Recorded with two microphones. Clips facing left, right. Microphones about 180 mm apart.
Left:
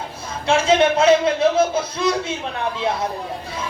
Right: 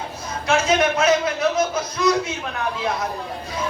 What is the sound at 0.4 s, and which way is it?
A man's voice, 30° left (ahead or behind).